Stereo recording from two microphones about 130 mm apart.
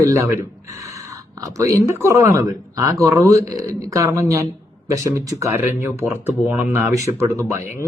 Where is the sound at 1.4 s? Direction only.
25° right (ahead or behind).